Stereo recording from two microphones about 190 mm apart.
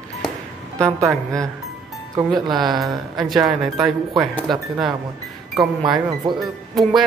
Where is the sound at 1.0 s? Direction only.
5° left (ahead or behind).